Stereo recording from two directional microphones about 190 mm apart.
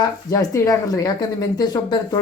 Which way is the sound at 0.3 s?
20° left (ahead or behind).